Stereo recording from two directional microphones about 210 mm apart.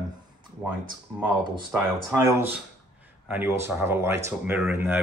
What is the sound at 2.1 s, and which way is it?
Speech, 15° right (ahead or behind).